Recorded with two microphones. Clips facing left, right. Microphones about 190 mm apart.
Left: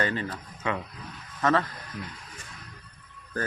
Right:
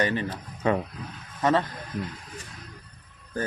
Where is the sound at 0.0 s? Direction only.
20° right (ahead or behind).